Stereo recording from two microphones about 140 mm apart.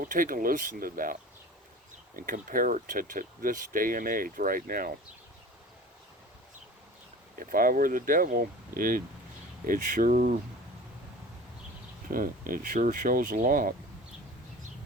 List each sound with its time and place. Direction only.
0.0 s speech: 80° right
7.3 s speech: 90° right
12.1 s speech: 90° right